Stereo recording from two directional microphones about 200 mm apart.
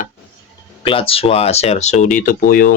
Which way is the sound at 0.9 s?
30° left (ahead or behind).